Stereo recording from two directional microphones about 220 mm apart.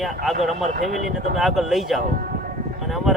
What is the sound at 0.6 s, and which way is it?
Speech, 35° right (ahead or behind).